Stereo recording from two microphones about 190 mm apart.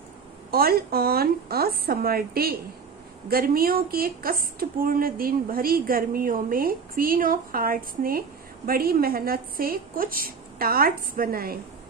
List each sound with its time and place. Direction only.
0.5 s speech: 55° right (ahead or behind)